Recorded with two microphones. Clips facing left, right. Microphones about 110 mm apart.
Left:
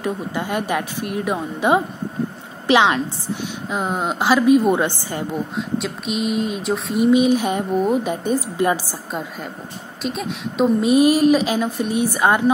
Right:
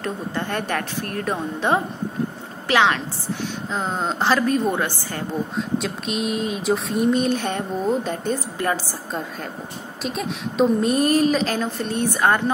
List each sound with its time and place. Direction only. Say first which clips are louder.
0.0 s a woman's voice: left 3 dB; 10° left (ahead or behind)
4.7 s a woman's voice: left 4 dB; 20° left (ahead or behind)
5.8 s speech: left 4 dB; centre (ahead or behind)